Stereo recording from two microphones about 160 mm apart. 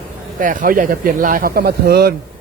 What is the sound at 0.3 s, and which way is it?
A man's voice, 55° right (ahead or behind).